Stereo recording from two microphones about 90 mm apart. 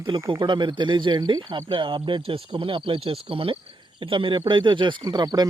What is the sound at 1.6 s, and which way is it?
Speech, 70° right (ahead or behind).